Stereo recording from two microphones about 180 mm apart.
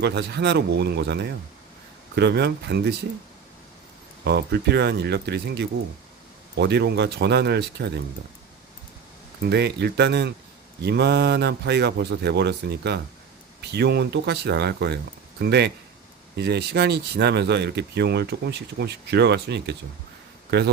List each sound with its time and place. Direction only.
0.0 s speech: 70° right (ahead or behind)
4.2 s speech: 65° right (ahead or behind)
9.4 s speech: 65° right (ahead or behind)